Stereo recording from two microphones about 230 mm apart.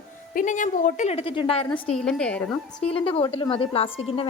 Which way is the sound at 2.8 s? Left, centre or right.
Left.